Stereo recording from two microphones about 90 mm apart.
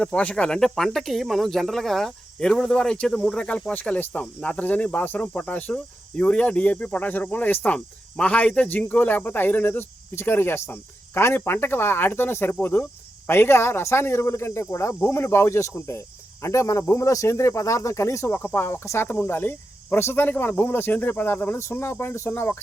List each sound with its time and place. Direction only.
0.0 s speech: 15° left (ahead or behind); by 18.3 s 30° left (ahead or behind)
18.3 s cricket: 25° left (ahead or behind)